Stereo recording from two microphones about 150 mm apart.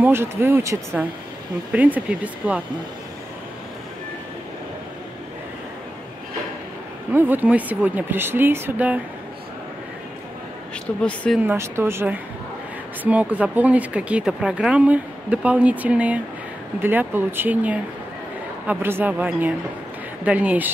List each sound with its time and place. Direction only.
0.0 s speech: 15° right (ahead or behind)
7.1 s speech: 10° right (ahead or behind)
11.0 s speech: 5° left (ahead or behind)
11.3 s speech: 15° right (ahead or behind)